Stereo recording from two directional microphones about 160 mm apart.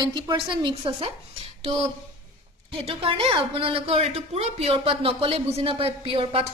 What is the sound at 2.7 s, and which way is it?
Speech, 35° right (ahead or behind).